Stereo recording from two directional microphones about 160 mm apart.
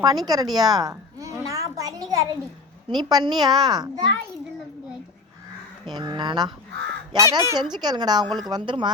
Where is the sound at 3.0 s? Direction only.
25° right (ahead or behind).